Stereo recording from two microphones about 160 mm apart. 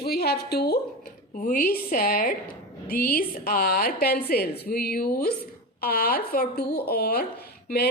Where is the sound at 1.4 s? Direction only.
60° left (ahead or behind).